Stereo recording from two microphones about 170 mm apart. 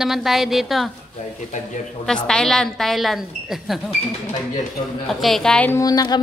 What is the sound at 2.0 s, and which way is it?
A woman's voice, 5° left (ahead or behind).